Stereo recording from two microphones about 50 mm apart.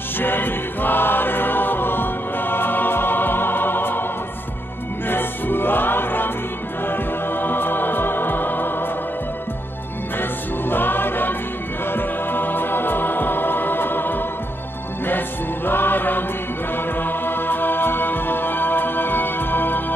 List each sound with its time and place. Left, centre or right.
0.2 s music: left
5.0 s music: left
10.7 s music: left